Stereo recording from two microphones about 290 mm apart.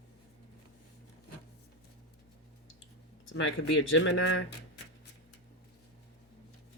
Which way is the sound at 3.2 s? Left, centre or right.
Left.